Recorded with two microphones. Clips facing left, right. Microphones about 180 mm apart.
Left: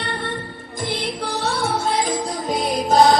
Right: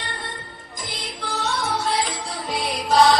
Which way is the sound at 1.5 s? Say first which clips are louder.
Left 3 dB; 30° left (ahead or behind).